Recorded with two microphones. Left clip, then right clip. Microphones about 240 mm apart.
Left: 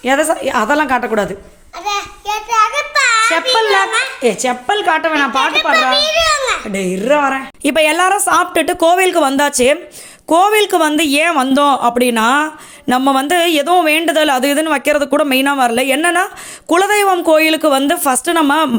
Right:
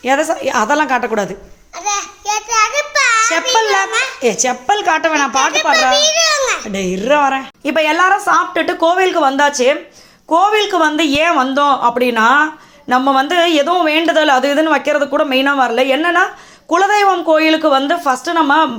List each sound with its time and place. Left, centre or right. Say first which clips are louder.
0.0 s a woman's voice: left 1 dB; centre
1.8 s a sound: even; centre
3.5 s a woman's voice: left 1 dB; centre
6.0 s babbling: even; centre
6.7 s a woman's voice: even; centre
7.7 s speech: even; left